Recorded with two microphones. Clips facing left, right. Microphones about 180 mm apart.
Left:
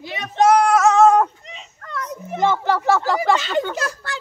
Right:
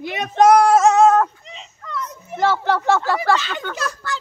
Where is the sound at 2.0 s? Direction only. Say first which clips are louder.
Even; 15° left (ahead or behind).